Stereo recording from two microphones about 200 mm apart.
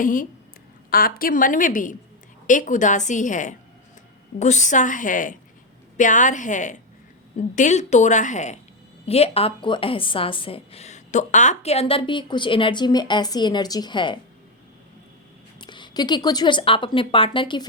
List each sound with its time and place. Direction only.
0.0 s a woman's voice: 40° left (ahead or behind); by 14.2 s 25° left (ahead or behind)
15.6 s a woman's voice: 25° left (ahead or behind)